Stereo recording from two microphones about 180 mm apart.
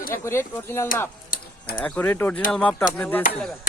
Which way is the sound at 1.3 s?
50° left (ahead or behind).